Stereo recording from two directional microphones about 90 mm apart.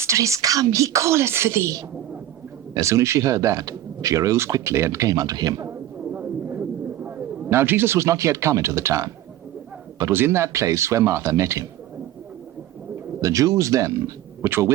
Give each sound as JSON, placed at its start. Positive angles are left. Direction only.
{"t": 0.0, "sound": "speech", "side_deg": -35}
{"t": 6.1, "sound": "a sound", "side_deg": -20}
{"t": 10.1, "sound": "speech", "side_deg": -25}
{"t": 13.2, "sound": "speech", "side_deg": -40}